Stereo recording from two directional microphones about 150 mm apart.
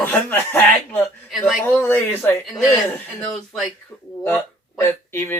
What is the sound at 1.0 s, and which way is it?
Speech, centre (ahead or behind).